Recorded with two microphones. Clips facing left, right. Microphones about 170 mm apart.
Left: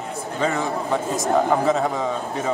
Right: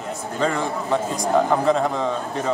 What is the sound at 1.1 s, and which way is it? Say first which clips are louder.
Speech: left 1 dB; 5° left (ahead or behind).